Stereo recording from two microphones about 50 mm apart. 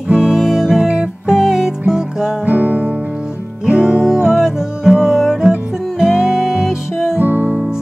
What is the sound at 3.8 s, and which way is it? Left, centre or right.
Music, centre.